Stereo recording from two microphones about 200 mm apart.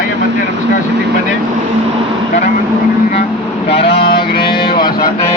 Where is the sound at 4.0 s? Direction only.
50° left (ahead or behind).